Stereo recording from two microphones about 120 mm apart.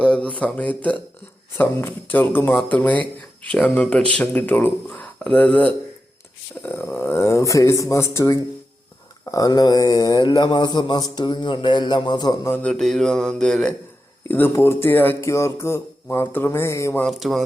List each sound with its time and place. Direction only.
0.0 s speech: 10° left (ahead or behind); by 12.5 s 35° left (ahead or behind)
12.5 s speech: 15° left (ahead or behind)
12.7 s mantra: centre (ahead or behind)
14.3 s speech: 15° left (ahead or behind)
17.0 s mantra: centre (ahead or behind)